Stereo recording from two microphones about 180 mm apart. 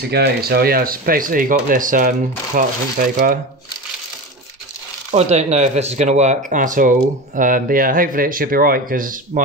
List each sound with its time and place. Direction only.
0.1 s speech: 60° right (ahead or behind)
5.1 s speech: 40° right (ahead or behind)